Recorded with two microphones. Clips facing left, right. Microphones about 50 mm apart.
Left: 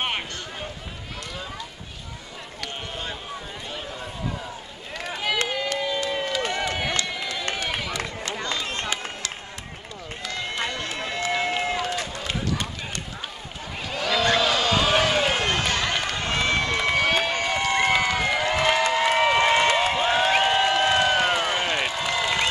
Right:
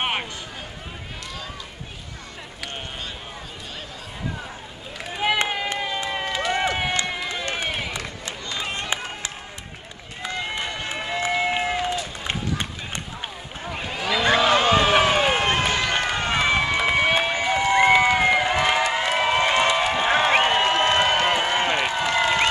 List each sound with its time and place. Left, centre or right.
0.0 s run: centre
5.2 s run: right
10.2 s run: right
13.7 s a sound: centre